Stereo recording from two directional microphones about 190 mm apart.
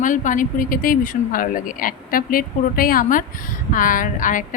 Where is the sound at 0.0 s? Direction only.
45° left (ahead or behind).